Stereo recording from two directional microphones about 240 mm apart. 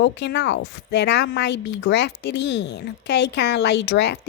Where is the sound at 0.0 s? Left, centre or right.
Left.